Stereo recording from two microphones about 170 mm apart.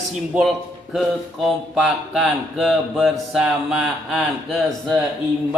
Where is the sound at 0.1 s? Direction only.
Centre (ahead or behind).